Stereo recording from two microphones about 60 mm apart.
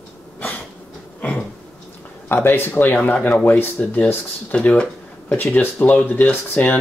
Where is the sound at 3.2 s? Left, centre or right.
Centre.